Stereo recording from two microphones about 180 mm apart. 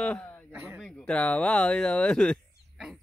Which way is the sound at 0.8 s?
5° left (ahead or behind).